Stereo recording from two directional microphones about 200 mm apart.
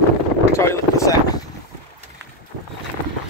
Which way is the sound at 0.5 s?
15° left (ahead or behind).